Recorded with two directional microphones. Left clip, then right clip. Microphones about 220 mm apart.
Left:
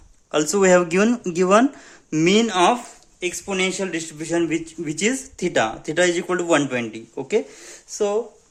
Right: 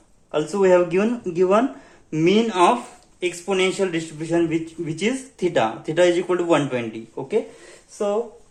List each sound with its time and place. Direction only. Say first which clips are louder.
0.3 s speech: left 1 dB; 45° left (ahead or behind)